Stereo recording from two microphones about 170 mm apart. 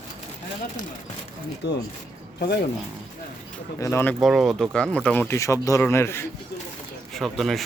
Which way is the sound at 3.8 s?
15° left (ahead or behind).